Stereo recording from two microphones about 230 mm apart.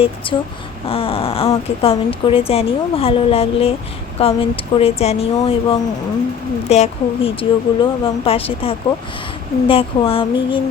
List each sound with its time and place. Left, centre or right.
0.3 s speech: left